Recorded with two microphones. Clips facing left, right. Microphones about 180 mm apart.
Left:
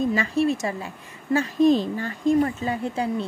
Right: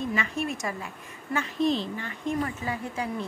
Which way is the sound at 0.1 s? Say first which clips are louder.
Left 8 dB; 35° left (ahead or behind).